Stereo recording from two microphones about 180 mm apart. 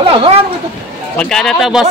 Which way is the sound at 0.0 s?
30° right (ahead or behind).